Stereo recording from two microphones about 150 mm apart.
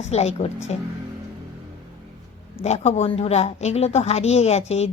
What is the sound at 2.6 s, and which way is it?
A woman's voice, 45° left (ahead or behind).